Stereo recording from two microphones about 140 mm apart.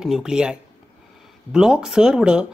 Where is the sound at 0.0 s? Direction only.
5° right (ahead or behind).